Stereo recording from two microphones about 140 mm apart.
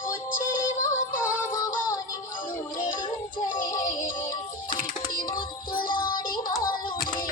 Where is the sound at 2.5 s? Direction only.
70° left (ahead or behind).